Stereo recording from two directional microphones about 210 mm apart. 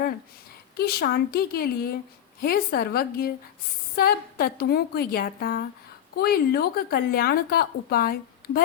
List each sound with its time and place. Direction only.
0.8 s speech: 45° left (ahead or behind)